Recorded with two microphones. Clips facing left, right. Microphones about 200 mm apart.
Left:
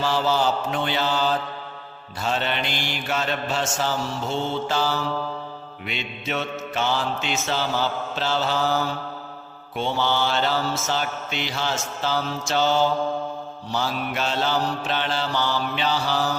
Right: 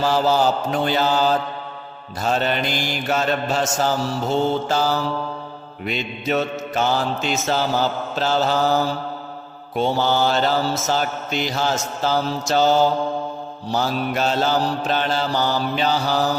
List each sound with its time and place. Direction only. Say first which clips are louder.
0.0 s mantra: right 4 dB; 40° right (ahead or behind)